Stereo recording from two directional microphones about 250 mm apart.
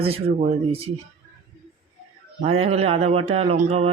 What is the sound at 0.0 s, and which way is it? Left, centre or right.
Mantra, right.